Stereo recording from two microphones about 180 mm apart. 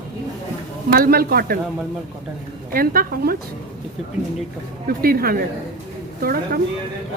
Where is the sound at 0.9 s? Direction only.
55° right (ahead or behind).